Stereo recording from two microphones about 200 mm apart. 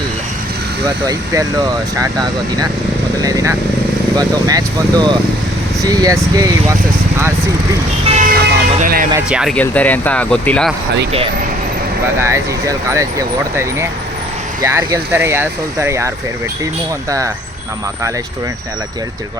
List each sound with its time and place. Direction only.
1.0 s speech: 20° right (ahead or behind)
8.2 s vehicle: 45° right (ahead or behind)
9.1 s speech: 5° right (ahead or behind)
9.6 s speech: 10° left (ahead or behind)
12.2 s speech: 15° right (ahead or behind)